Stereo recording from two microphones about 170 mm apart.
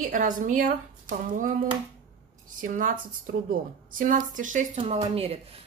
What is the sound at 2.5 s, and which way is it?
A woman's voice, 50° right (ahead or behind).